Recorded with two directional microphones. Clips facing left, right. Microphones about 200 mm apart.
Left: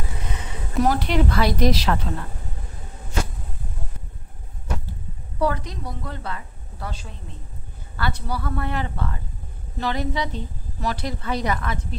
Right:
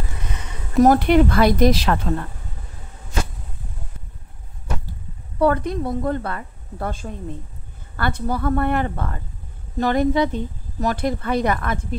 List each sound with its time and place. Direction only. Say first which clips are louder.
0.8 s speech: right 7 dB; 55° right (ahead or behind)
5.4 s speech: right 6 dB; 55° right (ahead or behind)